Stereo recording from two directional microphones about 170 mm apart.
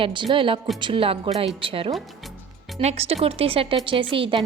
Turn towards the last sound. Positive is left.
turn(degrees=-30)  # may be behind; listen again after turning